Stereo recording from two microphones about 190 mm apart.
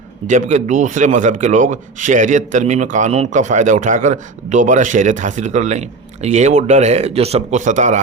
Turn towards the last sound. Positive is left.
turn(degrees=-40)  # may be behind; listen again after turning